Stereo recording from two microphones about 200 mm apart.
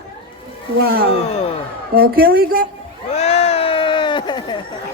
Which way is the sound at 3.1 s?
30° left (ahead or behind).